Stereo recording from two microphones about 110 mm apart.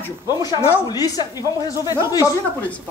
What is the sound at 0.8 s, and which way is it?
Speech, 35° left (ahead or behind).